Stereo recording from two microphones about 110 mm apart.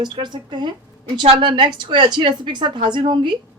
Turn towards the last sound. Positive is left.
turn(degrees=-45)  # may be behind; listen again after turning